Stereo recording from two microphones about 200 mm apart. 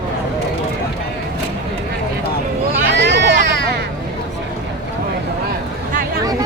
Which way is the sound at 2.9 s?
60° right (ahead or behind).